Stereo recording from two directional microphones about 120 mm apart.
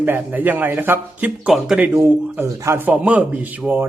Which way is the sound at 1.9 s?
20° right (ahead or behind).